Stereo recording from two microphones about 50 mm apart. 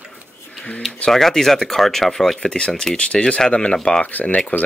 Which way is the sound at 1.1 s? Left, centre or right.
Centre.